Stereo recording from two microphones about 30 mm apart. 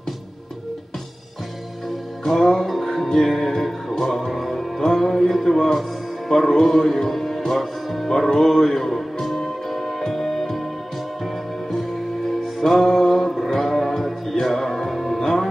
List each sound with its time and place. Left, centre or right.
2.2 s music: left
4.3 s music: centre
4.8 s music: left
5.1 s speech: centre
6.2 s music: centre
7.1 s music: centre
8.1 s music: left
12.6 s music: left